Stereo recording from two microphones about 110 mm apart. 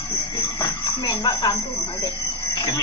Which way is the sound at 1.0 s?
35° left (ahead or behind).